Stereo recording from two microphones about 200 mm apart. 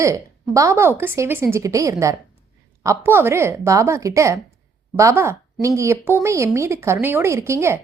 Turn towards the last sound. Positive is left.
turn(degrees=-15)  # may be behind; listen again after turning